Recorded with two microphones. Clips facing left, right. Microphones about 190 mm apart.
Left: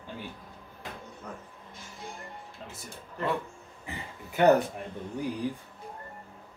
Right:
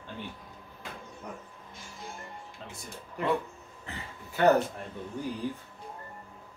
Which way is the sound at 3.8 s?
15° left (ahead or behind).